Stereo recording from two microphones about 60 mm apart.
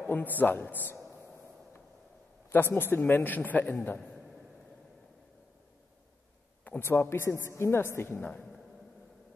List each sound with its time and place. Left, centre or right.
0.0 s a man's voice: left
2.5 s a man's voice: left
6.8 s speech: left